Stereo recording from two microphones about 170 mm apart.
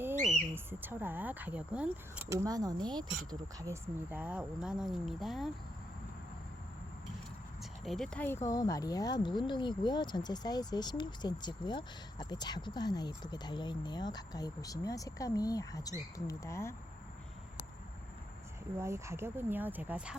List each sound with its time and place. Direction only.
0.5 s speech: 10° right (ahead or behind)
7.6 s speech: centre (ahead or behind)
18.8 s speech: 15° right (ahead or behind)